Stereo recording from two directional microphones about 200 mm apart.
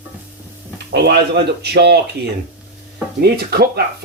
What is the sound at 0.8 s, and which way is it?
Speech, 55° right (ahead or behind).